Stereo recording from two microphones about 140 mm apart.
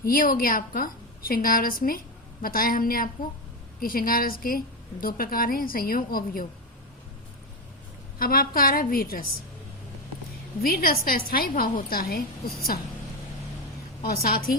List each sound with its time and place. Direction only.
0.0 s a woman's voice: 90° left
8.2 s a woman's voice: 90° left
10.6 s a woman's voice: 90° left
14.0 s a woman's voice: 90° left